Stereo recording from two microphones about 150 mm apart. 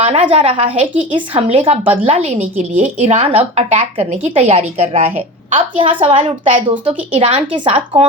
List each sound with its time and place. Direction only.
0.1 s a woman's voice: 40° right (ahead or behind)